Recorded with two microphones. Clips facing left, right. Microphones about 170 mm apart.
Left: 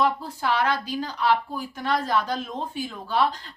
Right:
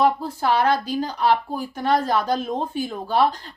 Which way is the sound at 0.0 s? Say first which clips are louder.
Right 4 dB; 40° right (ahead or behind).